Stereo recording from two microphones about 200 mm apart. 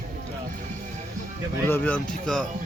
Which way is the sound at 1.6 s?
10° left (ahead or behind).